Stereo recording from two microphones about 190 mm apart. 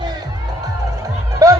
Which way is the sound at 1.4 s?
15° right (ahead or behind).